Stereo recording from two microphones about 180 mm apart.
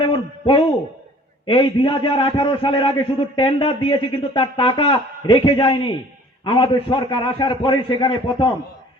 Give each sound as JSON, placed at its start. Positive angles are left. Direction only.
{"t": 0.0, "sound": "hoot", "side_deg": 30}
{"t": 1.5, "sound": "speech", "side_deg": 30}